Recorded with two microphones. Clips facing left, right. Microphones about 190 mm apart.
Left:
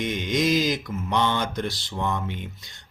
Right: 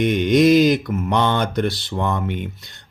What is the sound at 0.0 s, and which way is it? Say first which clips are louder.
Speech: right 10 dB; 60° right (ahead or behind).